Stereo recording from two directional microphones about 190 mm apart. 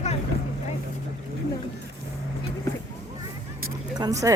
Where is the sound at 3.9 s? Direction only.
20° right (ahead or behind).